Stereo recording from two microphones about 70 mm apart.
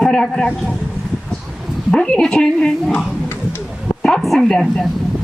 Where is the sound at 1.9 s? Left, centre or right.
Centre.